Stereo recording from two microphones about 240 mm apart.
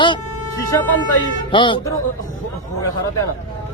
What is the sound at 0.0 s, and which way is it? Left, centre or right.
Music, centre.